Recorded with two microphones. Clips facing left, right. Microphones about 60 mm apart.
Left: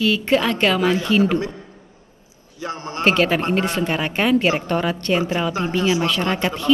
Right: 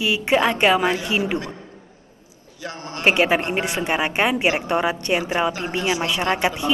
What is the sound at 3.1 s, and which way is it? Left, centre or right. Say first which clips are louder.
A woman's voice: even; centre.